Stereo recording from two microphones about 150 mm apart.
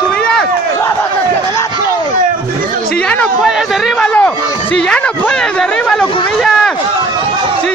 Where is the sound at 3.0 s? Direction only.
5° left (ahead or behind).